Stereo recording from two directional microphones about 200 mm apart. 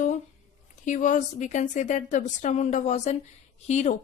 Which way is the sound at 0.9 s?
40° left (ahead or behind).